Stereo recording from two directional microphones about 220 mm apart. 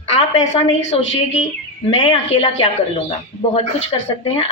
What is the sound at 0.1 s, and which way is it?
Speech, 30° left (ahead or behind).